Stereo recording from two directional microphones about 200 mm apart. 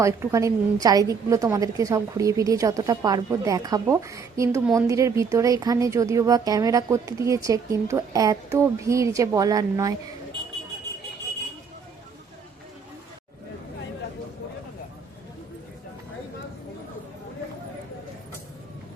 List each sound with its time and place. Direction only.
0.0 s speech: 15° right (ahead or behind)